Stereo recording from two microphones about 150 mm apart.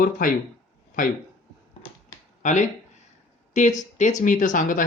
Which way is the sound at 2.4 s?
55° left (ahead or behind).